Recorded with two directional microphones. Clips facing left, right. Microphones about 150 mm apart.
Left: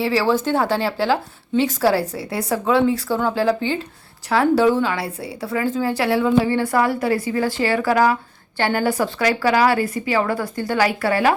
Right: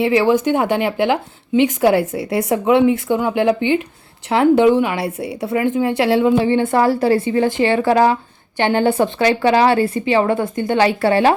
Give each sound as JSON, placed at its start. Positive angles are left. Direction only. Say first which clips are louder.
{"t": 0.0, "sound": "a woman's voice", "louder": "right 4 dB", "side_deg": -20}